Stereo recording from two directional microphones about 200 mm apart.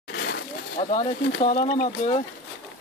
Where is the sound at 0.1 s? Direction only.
55° left (ahead or behind).